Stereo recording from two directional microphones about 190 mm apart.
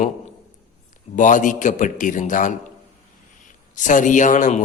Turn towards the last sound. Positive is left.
turn(degrees=40)  # may be behind; listen again after turning